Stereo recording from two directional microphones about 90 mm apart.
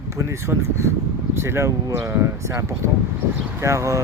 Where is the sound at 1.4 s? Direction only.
30° right (ahead or behind).